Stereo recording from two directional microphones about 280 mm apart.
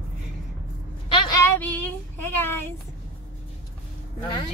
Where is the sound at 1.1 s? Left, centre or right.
Centre.